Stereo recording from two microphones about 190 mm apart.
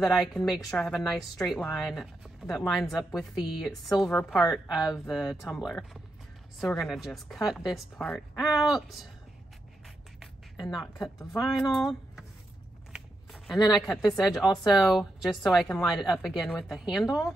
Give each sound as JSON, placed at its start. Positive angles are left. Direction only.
{"t": 0.5, "sound": "speech", "side_deg": 5}
{"t": 10.2, "sound": "a sound", "side_deg": 0}
{"t": 11.0, "sound": "speech", "side_deg": 20}
{"t": 11.4, "sound": "speech", "side_deg": 0}
{"t": 12.9, "sound": "a sound", "side_deg": 0}
{"t": 13.7, "sound": "speech", "side_deg": 0}